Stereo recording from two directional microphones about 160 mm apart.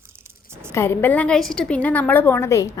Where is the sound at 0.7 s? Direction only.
15° left (ahead or behind).